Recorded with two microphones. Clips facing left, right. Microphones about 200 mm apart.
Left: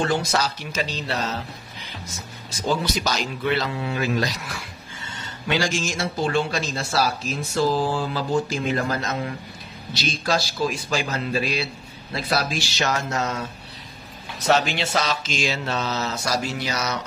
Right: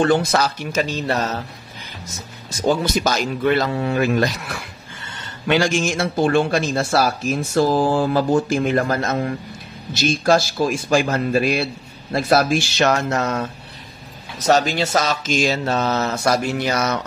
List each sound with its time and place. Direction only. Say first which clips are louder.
0.0 s speech: right 6 dB; 55° right (ahead or behind)
2.6 s speech: right 5 dB; 50° right (ahead or behind)
14.4 s speech: right 4 dB; 40° right (ahead or behind)